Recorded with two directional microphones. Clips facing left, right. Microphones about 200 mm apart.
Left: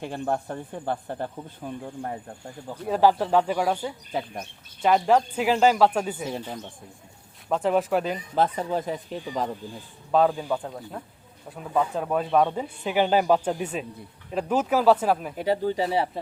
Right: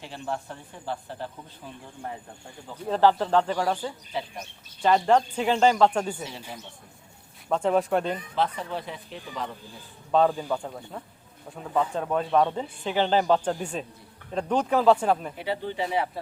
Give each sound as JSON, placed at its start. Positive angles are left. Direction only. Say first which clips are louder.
{"t": 0.0, "sound": "speech", "louder": "left 6 dB", "side_deg": 50}
{"t": 2.8, "sound": "speech", "louder": "left 1 dB", "side_deg": 10}
{"t": 4.1, "sound": "speech", "louder": "left 3 dB", "side_deg": 50}
{"t": 4.8, "sound": "speech", "louder": "left 1 dB", "side_deg": 5}
{"t": 7.5, "sound": "speech", "louder": "even", "side_deg": 0}
{"t": 8.4, "sound": "speech", "louder": "left 6 dB", "side_deg": 45}
{"t": 10.1, "sound": "speech", "louder": "left 1 dB", "side_deg": 5}
{"t": 15.4, "sound": "speech", "louder": "left 5 dB", "side_deg": 40}